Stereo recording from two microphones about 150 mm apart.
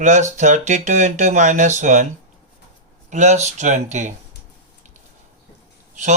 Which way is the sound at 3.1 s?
50° right (ahead or behind).